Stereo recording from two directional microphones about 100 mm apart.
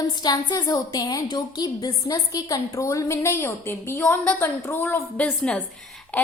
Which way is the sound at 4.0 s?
10° left (ahead or behind).